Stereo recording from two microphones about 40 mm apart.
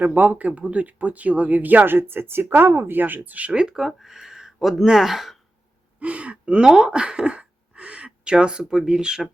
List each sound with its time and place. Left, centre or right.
0.0 s speech: right
3.5 s speech: right
3.8 s speech: centre
6.0 s speech: right
6.7 s a sound: centre
8.9 s speech: centre